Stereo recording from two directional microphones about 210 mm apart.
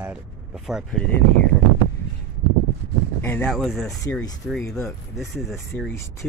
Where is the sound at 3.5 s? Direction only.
Centre (ahead or behind).